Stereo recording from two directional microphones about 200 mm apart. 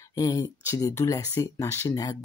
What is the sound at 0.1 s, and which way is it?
Speech, 20° left (ahead or behind).